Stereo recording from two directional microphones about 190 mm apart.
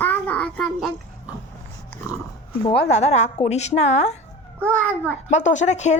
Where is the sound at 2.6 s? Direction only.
30° left (ahead or behind).